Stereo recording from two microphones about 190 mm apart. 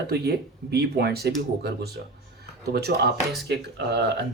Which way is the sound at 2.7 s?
55° right (ahead or behind).